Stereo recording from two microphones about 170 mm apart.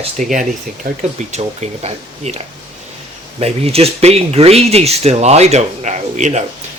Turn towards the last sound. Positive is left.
turn(degrees=-45)  # may be behind; listen again after turning